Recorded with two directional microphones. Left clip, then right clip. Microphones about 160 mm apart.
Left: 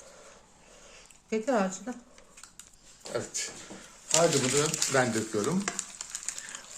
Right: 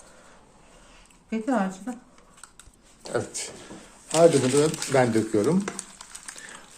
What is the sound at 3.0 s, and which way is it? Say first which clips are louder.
Speech: right 5 dB; 30° right (ahead or behind).